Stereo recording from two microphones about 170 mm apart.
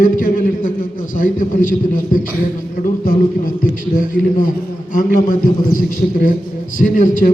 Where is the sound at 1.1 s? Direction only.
50° left (ahead or behind).